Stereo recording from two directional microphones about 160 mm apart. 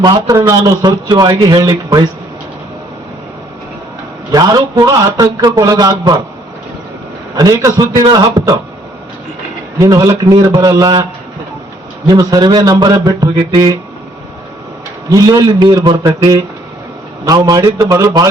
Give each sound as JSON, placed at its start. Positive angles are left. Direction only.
{"t": 0.0, "sound": "a man's voice", "side_deg": -25}
{"t": 4.3, "sound": "a man's voice", "side_deg": -25}
{"t": 7.3, "sound": "a man's voice", "side_deg": -20}
{"t": 9.7, "sound": "a man's voice", "side_deg": -20}
{"t": 12.0, "sound": "a man's voice", "side_deg": -25}
{"t": 15.1, "sound": "a man's voice", "side_deg": -25}